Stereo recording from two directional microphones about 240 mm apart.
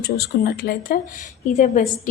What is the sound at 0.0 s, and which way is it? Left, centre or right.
A woman's voice, left.